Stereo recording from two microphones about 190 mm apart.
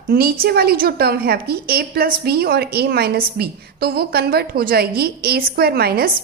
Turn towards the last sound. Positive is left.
turn(degrees=-55)  # may be behind; listen again after turning